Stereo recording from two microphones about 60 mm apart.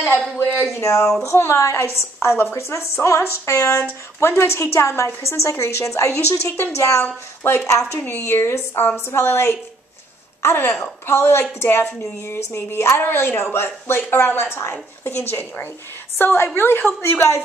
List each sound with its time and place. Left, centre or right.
0.0 s speech: left
0.7 s speech: left
1.2 s a woman's voice: left
2.3 s a woman's voice: left
8.1 s a woman's voice: left